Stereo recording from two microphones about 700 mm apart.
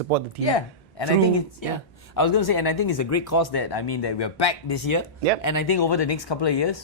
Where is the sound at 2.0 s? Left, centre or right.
Left.